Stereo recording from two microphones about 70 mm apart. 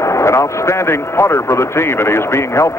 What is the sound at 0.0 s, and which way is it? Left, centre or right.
Speech, left.